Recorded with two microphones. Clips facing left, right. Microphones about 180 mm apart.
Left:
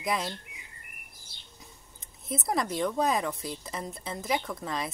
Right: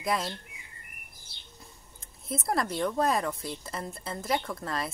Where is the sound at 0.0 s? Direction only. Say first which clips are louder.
Right 1 dB; centre (ahead or behind).